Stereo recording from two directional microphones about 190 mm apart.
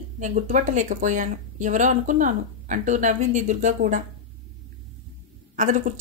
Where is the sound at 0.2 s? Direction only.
45° right (ahead or behind).